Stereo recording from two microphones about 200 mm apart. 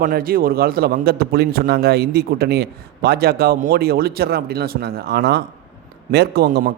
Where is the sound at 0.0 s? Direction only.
45° right (ahead or behind).